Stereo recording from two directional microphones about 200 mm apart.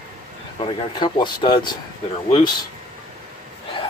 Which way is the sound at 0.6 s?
25° left (ahead or behind).